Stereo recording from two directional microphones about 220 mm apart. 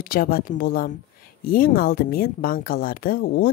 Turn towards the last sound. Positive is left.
turn(degrees=40)  # may be behind; listen again after turning